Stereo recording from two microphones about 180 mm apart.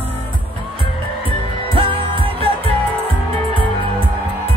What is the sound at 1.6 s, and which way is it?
Music, 30° right (ahead or behind).